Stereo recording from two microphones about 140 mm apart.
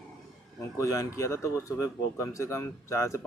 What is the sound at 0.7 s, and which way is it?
Speech, 20° left (ahead or behind).